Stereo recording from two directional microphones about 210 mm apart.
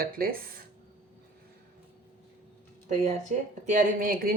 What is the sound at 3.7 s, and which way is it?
Speech, 40° right (ahead or behind).